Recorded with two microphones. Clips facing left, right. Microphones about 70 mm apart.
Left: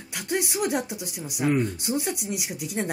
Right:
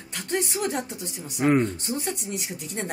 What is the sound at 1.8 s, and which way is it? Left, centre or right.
Speech, centre.